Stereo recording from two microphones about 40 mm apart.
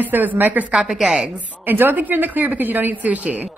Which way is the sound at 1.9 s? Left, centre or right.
Right.